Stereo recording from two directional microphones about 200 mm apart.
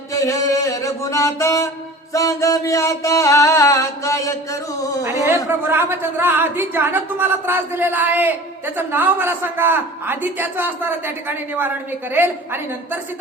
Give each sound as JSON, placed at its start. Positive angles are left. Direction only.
{"t": 0.1, "sound": "music", "side_deg": 15}
{"t": 5.6, "sound": "speech", "side_deg": -10}